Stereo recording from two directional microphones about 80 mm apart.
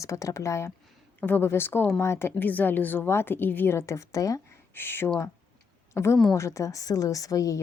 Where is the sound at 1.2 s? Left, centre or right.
Left.